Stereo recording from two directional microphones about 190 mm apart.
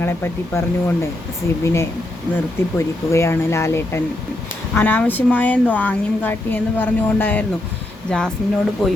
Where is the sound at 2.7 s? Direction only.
15° left (ahead or behind).